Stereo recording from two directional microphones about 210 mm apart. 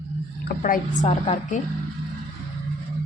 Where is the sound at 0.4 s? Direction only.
40° left (ahead or behind).